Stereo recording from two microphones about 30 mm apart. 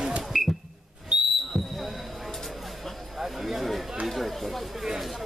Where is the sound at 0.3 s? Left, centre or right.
Centre.